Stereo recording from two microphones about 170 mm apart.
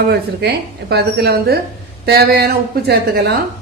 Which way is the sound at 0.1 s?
70° right (ahead or behind).